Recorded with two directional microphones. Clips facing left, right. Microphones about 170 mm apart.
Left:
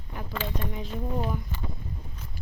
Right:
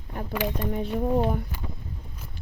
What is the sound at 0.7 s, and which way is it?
Speech, 55° right (ahead or behind).